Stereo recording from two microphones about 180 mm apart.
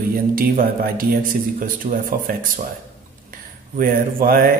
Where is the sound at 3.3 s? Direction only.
50° right (ahead or behind).